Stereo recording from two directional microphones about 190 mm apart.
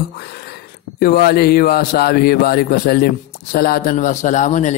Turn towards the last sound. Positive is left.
turn(degrees=40)  # may be behind; listen again after turning